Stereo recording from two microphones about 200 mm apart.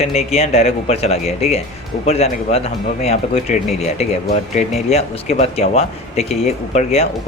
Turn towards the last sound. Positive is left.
turn(degrees=35)  # may be behind; listen again after turning